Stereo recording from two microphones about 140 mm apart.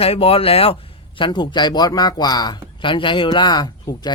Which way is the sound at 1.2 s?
35° left (ahead or behind).